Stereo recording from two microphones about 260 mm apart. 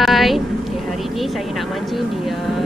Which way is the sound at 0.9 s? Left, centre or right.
Centre.